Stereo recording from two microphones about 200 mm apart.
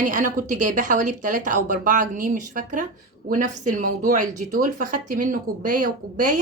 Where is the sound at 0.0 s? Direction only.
40° right (ahead or behind).